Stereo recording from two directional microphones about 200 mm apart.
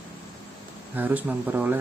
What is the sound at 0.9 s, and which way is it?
Speech, 10° right (ahead or behind).